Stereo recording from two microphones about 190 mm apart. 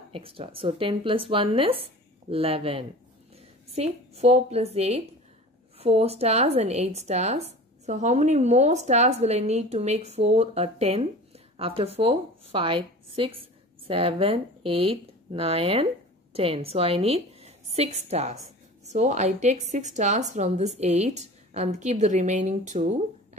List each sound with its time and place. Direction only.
0.1 s a woman's voice: 30° right (ahead or behind)